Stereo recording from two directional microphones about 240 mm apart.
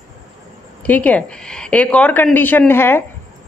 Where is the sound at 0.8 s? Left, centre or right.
Centre.